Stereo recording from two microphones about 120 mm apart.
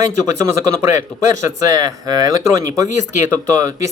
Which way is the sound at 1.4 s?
30° right (ahead or behind).